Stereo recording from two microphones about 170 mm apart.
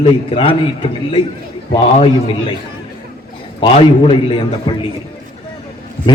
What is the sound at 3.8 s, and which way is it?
Speech, 30° left (ahead or behind).